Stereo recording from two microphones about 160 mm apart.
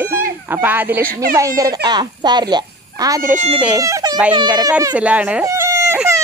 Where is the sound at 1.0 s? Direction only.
65° right (ahead or behind).